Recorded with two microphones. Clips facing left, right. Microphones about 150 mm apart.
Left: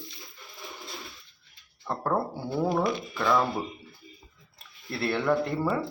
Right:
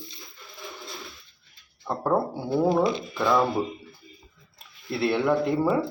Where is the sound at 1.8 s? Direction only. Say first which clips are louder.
Right 4 dB; 15° right (ahead or behind).